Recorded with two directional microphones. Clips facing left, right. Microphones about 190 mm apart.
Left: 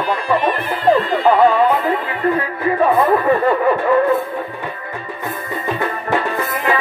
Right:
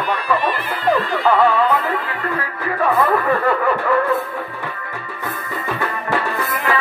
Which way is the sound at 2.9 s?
20° left (ahead or behind).